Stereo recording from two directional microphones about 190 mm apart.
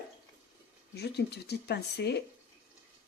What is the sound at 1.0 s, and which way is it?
Speech, 60° left (ahead or behind).